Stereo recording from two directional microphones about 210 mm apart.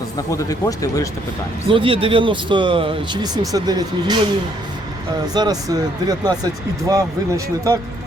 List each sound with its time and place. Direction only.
0.3 s speech: 15° left (ahead or behind)
1.7 s speech: 25° right (ahead or behind)
5.3 s speech: 20° right (ahead or behind)